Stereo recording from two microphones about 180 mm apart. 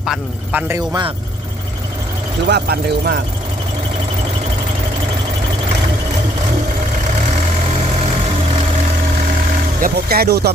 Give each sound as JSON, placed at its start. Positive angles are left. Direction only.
{"t": 0.0, "sound": "speech", "side_deg": 0}
{"t": 0.7, "sound": "speech", "side_deg": -25}
{"t": 2.5, "sound": "speech", "side_deg": -60}
{"t": 9.8, "sound": "speech", "side_deg": -60}